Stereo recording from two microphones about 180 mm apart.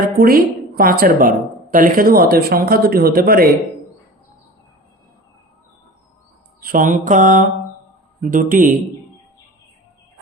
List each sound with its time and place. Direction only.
0.0 s a woman's voice: 55° right (ahead or behind)
6.6 s mantra: 50° right (ahead or behind)